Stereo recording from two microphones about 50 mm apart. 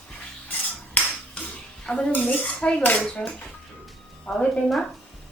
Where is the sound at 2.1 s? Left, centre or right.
Left.